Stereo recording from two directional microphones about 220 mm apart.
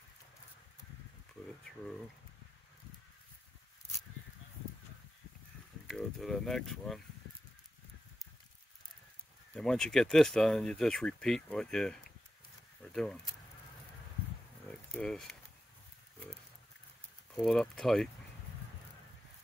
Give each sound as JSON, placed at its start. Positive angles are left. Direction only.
{"t": 5.9, "sound": "speech", "side_deg": 0}
{"t": 9.6, "sound": "speech", "side_deg": 5}
{"t": 14.7, "sound": "a sound", "side_deg": 5}
{"t": 17.4, "sound": "speech", "side_deg": 0}